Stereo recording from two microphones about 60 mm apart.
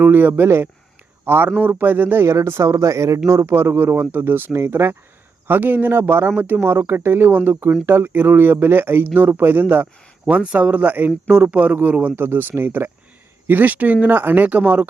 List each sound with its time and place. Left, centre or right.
0.0 s speech: right
2.2 s speech: right
3.2 s speech: right
10.2 s speech: centre